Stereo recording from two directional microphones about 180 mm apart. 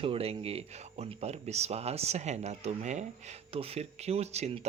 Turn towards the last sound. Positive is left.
turn(degrees=-35)  # may be behind; listen again after turning